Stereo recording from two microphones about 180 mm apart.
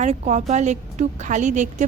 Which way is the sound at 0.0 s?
40° right (ahead or behind).